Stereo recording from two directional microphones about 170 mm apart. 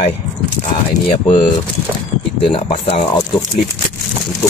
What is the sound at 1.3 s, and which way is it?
Speech, 30° left (ahead or behind).